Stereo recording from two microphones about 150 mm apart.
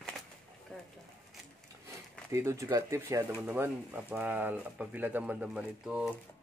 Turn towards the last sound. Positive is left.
turn(degrees=-5)  # may be behind; listen again after turning